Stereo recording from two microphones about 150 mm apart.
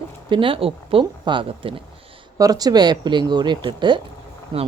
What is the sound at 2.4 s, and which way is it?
Speech, 25° right (ahead or behind).